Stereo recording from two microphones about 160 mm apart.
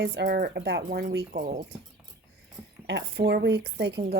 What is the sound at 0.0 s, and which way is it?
Speech, 85° right.